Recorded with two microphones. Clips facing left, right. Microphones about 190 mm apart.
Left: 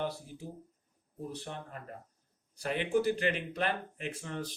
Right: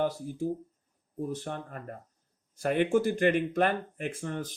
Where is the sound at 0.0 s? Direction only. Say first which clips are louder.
Right 8 dB; 45° right (ahead or behind).